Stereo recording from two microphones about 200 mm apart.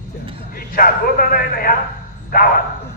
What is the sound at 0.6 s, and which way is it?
A man's voice, 45° left (ahead or behind).